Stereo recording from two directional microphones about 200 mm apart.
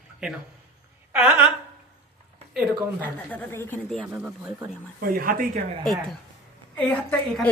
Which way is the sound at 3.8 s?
Centre (ahead or behind).